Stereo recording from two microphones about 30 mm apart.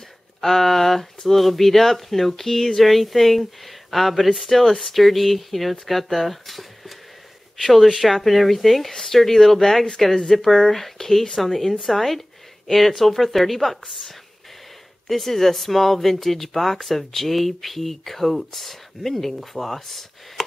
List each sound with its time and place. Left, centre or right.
0.4 s speech: centre
7.6 s speech: centre
15.0 s speech: centre